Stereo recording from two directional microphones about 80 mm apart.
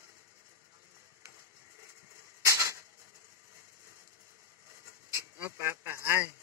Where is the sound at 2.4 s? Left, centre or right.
Right.